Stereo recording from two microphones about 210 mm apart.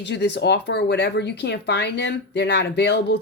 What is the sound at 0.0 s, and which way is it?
Speech, 55° left (ahead or behind).